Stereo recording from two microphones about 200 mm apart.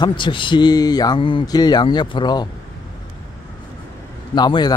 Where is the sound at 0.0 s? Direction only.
25° left (ahead or behind).